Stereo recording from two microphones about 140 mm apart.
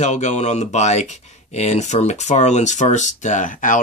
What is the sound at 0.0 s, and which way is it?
Speech, 55° left (ahead or behind).